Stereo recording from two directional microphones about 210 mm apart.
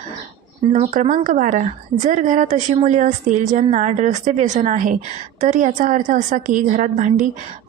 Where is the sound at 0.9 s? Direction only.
40° right (ahead or behind).